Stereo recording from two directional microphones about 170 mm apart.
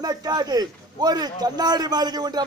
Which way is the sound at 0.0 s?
25° right (ahead or behind).